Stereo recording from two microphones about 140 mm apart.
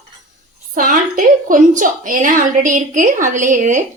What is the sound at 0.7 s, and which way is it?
A woman's voice, 80° right.